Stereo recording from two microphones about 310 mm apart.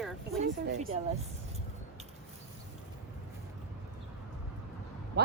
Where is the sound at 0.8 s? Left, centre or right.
Right.